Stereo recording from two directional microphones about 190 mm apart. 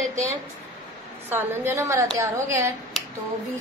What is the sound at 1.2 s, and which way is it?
A woman's voice, 10° right (ahead or behind).